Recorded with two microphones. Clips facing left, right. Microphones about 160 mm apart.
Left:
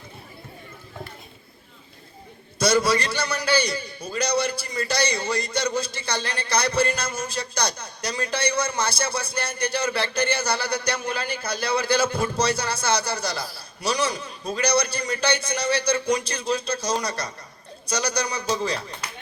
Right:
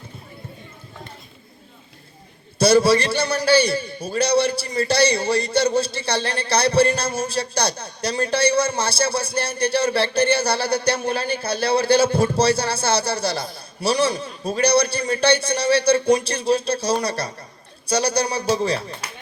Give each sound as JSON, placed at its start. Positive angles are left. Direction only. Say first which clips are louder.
{"t": 2.6, "sound": "a man's voice", "louder": "right 5 dB", "side_deg": -30}
{"t": 18.4, "sound": "speech", "louder": "right 5 dB", "side_deg": -60}